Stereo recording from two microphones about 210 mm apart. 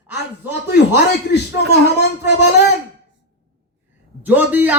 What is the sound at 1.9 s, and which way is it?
Speech, 55° left (ahead or behind).